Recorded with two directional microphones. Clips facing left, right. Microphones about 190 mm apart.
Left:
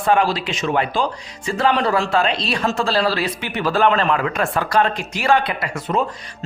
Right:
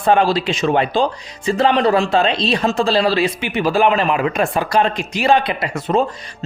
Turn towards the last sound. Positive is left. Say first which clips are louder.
# right 4 dB
turn(degrees=-25)  # may be behind; listen again after turning